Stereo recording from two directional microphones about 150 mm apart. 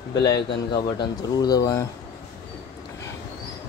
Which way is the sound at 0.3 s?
30° left (ahead or behind).